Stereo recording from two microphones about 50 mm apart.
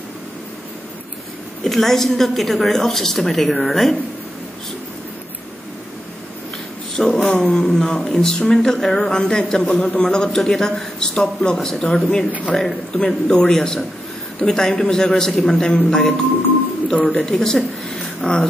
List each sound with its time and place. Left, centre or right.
1.6 s a woman's voice: centre
7.0 s speech: centre
7.2 s speech: centre
16.9 s speech: centre
17.2 s speech: centre